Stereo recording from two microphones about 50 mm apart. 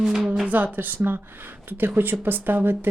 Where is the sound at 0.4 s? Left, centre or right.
Right.